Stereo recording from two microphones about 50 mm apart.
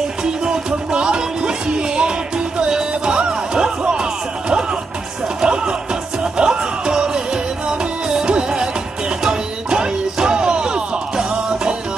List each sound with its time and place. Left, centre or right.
0.2 s music: centre